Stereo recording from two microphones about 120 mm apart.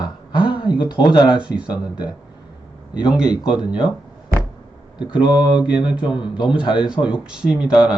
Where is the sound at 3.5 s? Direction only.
40° left (ahead or behind).